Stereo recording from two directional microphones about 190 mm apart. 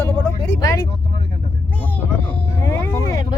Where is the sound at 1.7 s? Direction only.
10° left (ahead or behind).